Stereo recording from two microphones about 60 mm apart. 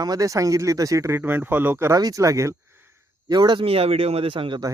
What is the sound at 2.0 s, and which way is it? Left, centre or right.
Speech, right.